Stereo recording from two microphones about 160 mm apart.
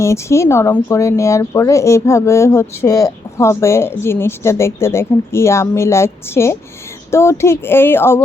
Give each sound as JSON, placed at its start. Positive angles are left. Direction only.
{"t": 0.0, "sound": "speech", "side_deg": 15}